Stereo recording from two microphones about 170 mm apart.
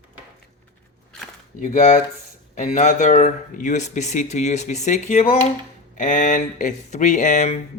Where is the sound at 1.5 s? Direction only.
45° left (ahead or behind).